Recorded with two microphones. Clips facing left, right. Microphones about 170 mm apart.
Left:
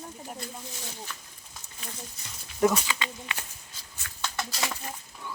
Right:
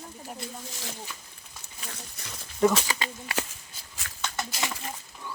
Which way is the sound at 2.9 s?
40° right (ahead or behind).